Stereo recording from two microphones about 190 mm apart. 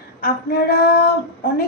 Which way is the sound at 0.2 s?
55° left (ahead or behind).